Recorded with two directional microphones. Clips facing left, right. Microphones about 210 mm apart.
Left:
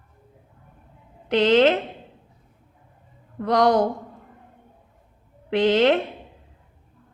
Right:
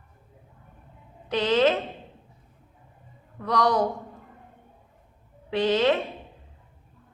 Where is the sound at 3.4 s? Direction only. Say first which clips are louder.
Left 5 dB; 75° left (ahead or behind).